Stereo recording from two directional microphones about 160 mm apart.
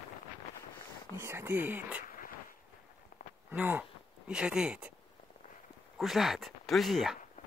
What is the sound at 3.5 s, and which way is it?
Speech, 10° right (ahead or behind).